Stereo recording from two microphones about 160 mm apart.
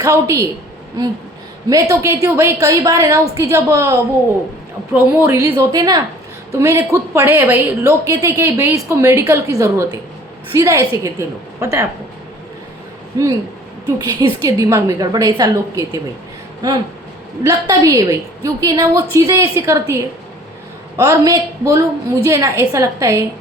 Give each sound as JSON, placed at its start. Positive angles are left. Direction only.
{"t": 0.0, "sound": "a woman's voice", "side_deg": -20}
{"t": 1.7, "sound": "a woman's voice", "side_deg": -20}
{"t": 4.9, "sound": "a woman's voice", "side_deg": -15}
{"t": 13.2, "sound": "a woman's voice", "side_deg": -20}
{"t": 17.4, "sound": "a woman's voice", "side_deg": -20}